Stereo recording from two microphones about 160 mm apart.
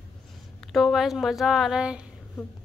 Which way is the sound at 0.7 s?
Centre (ahead or behind).